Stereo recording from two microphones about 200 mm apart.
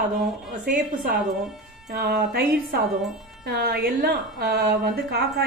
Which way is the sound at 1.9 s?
50° right (ahead or behind).